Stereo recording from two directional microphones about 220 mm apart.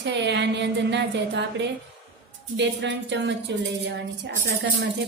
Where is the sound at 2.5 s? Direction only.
55° right (ahead or behind).